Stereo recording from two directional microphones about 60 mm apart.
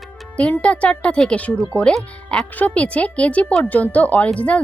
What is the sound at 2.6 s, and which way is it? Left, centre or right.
A woman's voice, left.